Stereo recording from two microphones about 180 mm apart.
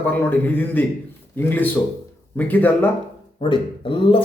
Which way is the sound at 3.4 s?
30° left (ahead or behind).